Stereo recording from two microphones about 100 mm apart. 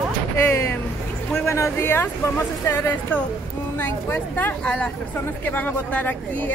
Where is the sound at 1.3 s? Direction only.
25° left (ahead or behind).